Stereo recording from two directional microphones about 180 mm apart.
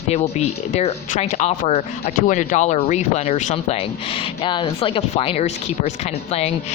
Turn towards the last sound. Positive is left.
turn(degrees=35)  # may be behind; listen again after turning